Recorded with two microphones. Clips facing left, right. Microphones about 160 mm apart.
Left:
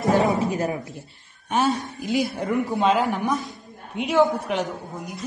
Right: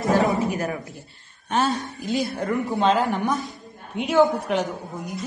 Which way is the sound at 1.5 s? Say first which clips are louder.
Left 1 dB; centre (ahead or behind).